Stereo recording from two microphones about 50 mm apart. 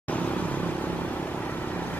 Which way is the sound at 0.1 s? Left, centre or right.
Left.